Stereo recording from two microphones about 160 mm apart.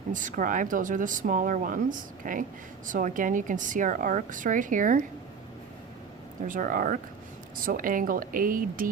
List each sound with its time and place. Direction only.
0.1 s speech: 55° right (ahead or behind)
6.5 s speech: 55° right (ahead or behind)